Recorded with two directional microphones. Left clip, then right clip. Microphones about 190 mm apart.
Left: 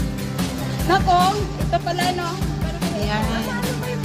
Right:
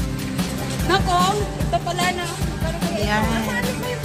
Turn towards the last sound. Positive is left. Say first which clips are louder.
# right 2 dB
turn(degrees=0)  # may be behind; listen again after turning